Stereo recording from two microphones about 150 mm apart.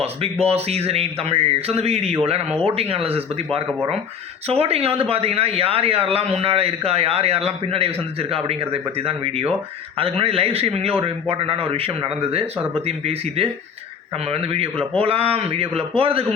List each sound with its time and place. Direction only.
0.0 s a man's voice: 40° right (ahead or behind)